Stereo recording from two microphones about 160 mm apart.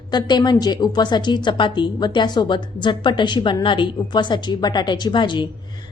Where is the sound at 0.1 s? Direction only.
25° left (ahead or behind).